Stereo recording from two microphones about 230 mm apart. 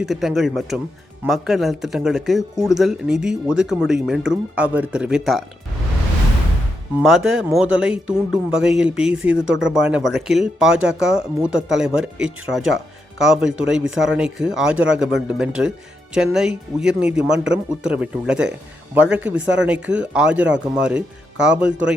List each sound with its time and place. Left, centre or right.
0.0 s speech: centre
7.3 s speech: centre